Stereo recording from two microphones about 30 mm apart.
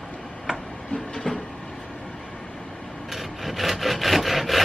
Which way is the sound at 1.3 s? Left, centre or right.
Left.